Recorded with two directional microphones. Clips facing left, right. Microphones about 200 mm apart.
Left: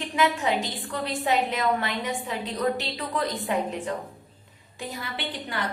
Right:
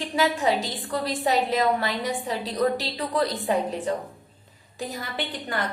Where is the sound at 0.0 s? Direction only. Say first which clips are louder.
Right 2 dB; 35° right (ahead or behind).